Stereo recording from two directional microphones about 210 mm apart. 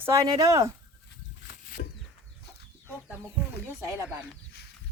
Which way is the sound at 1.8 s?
50° left (ahead or behind).